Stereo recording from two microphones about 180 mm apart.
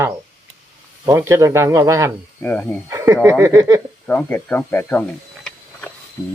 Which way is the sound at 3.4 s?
15° right (ahead or behind).